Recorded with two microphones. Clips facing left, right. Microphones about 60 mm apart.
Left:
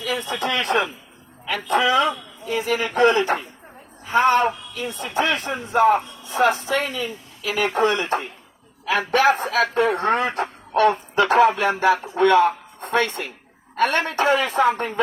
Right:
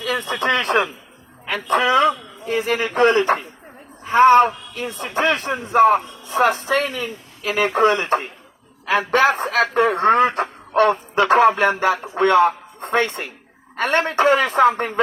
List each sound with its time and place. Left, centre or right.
0.1 s speech: right
12.1 s speech: right